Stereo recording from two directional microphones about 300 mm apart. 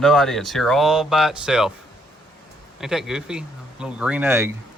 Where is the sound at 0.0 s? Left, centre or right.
Centre.